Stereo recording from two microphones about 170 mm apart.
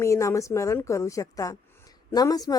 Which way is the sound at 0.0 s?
20° left (ahead or behind).